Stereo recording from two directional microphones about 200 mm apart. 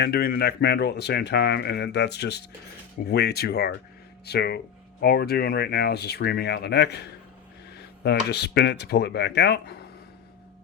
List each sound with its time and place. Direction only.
0.0 s speech: 50° left (ahead or behind)
8.0 s speech: 55° left (ahead or behind)